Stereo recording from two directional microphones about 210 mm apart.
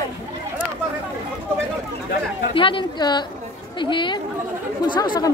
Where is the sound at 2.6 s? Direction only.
25° left (ahead or behind).